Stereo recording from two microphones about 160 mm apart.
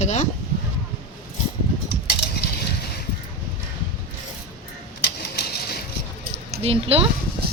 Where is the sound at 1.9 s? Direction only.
90° left.